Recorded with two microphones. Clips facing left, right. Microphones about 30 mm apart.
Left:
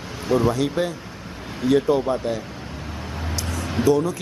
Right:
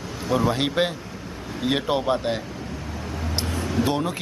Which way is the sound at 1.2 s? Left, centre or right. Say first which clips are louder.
Right 1 dB; left.